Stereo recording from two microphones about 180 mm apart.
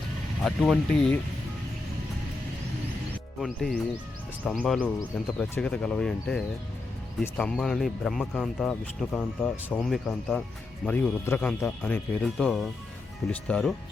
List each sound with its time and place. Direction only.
0.4 s speech: 5° left (ahead or behind)
3.4 s speech: centre (ahead or behind)